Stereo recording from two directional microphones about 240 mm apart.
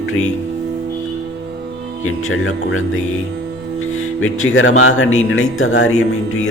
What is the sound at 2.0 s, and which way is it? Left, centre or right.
Speech, left.